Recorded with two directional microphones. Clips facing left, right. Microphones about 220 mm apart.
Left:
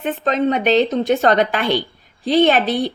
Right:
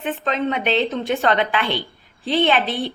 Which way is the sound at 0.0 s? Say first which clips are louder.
Left 4 dB; 40° left (ahead or behind).